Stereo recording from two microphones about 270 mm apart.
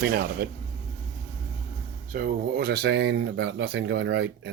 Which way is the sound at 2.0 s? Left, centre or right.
Right.